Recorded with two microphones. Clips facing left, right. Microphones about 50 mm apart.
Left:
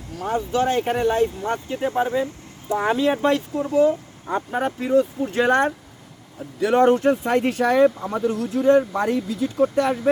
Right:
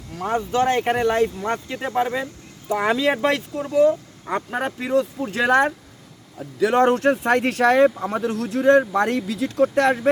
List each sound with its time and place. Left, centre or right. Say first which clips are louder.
0.2 s speech: right 1 dB; right
2.7 s speech: even; right
6.7 s speech: left 1 dB; right